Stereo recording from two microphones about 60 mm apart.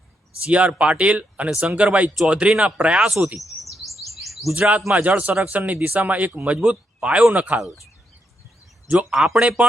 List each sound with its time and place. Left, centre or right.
0.4 s speech: right
3.0 s speech: centre
3.3 s chirp: centre
4.5 s speech: centre
5.0 s speech: right
9.0 s speech: centre